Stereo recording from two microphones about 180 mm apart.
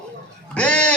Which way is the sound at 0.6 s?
5° left (ahead or behind).